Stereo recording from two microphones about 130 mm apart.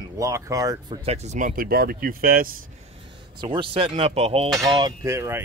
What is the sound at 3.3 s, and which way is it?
Speech, 40° right (ahead or behind).